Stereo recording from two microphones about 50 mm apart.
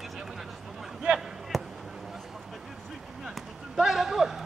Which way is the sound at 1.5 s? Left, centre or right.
Centre.